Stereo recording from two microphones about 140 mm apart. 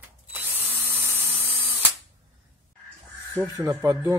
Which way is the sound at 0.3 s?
15° right (ahead or behind).